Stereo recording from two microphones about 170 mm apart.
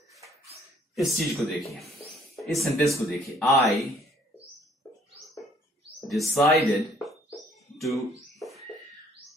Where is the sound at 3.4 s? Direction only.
20° left (ahead or behind).